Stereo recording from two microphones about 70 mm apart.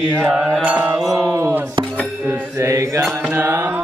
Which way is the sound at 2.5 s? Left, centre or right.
Right.